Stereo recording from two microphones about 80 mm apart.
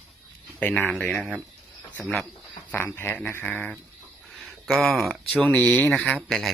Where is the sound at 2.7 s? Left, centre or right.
Left.